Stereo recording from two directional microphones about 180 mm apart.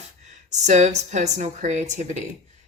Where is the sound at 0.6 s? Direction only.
40° right (ahead or behind).